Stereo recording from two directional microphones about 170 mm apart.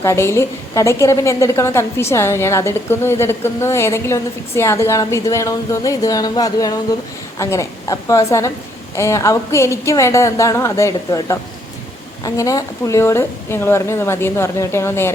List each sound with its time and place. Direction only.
0.0 s a woman's voice: 15° left (ahead or behind)